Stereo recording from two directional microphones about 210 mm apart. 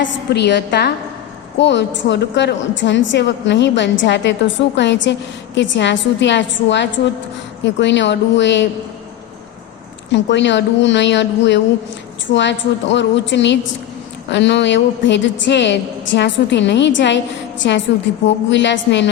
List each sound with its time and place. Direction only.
0.0 s a woman's voice: 55° left (ahead or behind)
10.1 s a woman's voice: 60° left (ahead or behind)